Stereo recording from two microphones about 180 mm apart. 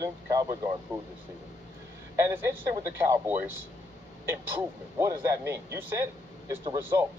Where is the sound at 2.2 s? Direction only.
15° right (ahead or behind).